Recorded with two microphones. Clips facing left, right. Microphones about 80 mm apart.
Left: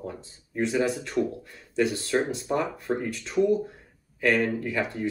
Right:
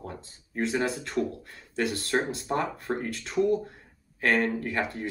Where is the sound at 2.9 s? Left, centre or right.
Right.